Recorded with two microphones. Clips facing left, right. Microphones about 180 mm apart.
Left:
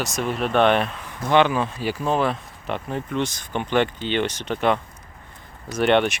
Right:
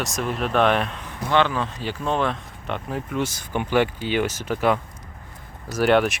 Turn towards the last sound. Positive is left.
turn(degrees=0)  # may be behind; listen again after turning